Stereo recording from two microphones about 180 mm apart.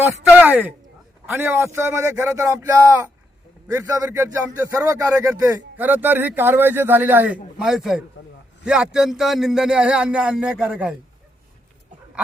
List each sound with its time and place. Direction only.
0.0 s a man's voice: 10° right (ahead or behind)